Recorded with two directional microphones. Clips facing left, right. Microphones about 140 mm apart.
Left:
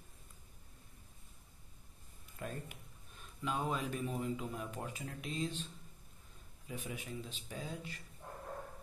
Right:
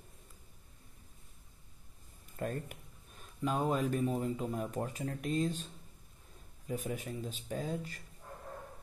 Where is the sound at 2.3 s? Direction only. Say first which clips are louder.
Right 6 dB; 50° right (ahead or behind).